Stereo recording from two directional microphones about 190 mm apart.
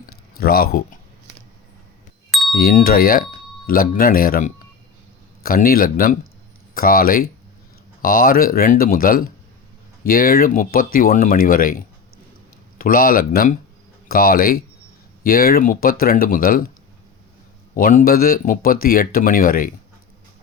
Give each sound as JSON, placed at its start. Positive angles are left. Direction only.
{"t": 0.3, "sound": "speech", "side_deg": 50}
{"t": 2.3, "sound": "a sound", "side_deg": 0}
{"t": 2.6, "sound": "speech", "side_deg": 50}
{"t": 5.6, "sound": "speech", "side_deg": 50}
{"t": 12.8, "sound": "speech", "side_deg": 50}
{"t": 17.7, "sound": "speech", "side_deg": 45}